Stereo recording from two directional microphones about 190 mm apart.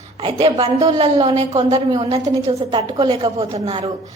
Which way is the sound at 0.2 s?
30° right (ahead or behind).